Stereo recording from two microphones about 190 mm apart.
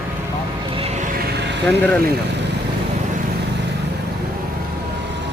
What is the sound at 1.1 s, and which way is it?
Vehicle, 55° right (ahead or behind).